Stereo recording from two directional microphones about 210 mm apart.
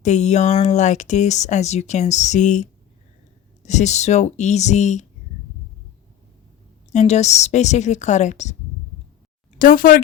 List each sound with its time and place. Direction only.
0.0 s speech: 35° left (ahead or behind)
6.9 s speech: 35° left (ahead or behind)
9.6 s speech: 40° left (ahead or behind)